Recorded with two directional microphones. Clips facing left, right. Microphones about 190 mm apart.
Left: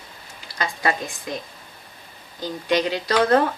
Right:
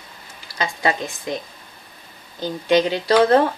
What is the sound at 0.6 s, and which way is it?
Speech, 25° right (ahead or behind).